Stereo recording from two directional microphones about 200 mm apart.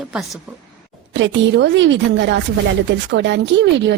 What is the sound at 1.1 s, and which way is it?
Speech, 65° right (ahead or behind).